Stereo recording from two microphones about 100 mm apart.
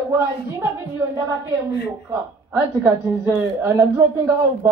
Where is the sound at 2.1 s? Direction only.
25° right (ahead or behind).